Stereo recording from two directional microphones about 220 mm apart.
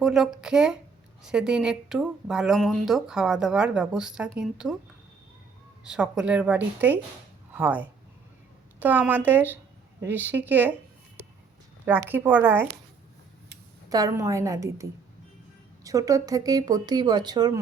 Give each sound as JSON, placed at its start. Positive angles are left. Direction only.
{"t": 0.0, "sound": "speech", "side_deg": 0}
{"t": 5.8, "sound": "speech", "side_deg": -5}
{"t": 11.9, "sound": "speech", "side_deg": -10}
{"t": 13.9, "sound": "speech", "side_deg": -15}